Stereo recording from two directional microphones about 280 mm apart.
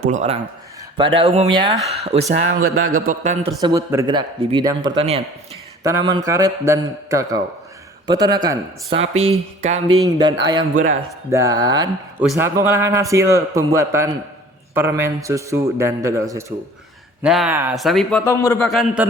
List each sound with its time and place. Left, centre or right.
0.0 s a man's voice: right
2.6 s speech: right
3.1 s speech: right
3.6 s a man's voice: centre